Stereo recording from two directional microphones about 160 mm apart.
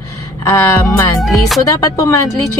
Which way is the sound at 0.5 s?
20° left (ahead or behind).